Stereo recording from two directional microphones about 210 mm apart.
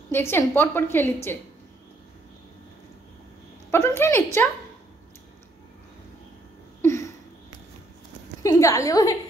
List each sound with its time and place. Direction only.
0.1 s a woman's voice: 10° left (ahead or behind)
3.7 s a woman's voice: 10° left (ahead or behind)
6.8 s a sound: 15° left (ahead or behind)
8.4 s a woman's voice: 15° left (ahead or behind)